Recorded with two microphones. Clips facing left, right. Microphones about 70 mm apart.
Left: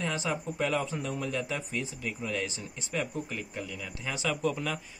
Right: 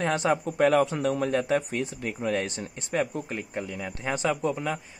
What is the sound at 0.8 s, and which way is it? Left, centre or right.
Speech, right.